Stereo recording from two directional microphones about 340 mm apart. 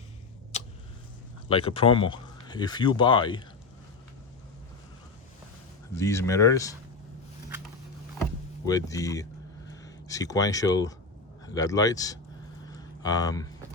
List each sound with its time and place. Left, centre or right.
0.5 s tick-tock: centre
1.5 s speech: centre
6.0 s speech: centre
8.6 s speech: centre
12.6 s a sound: centre